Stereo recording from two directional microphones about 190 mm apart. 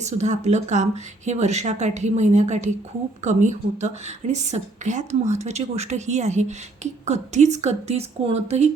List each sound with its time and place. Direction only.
0.0 s a woman's voice: 35° right (ahead or behind)